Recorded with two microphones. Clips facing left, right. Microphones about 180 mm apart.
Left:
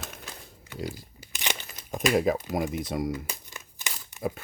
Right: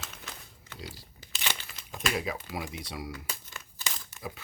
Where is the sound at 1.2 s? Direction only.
15° left (ahead or behind).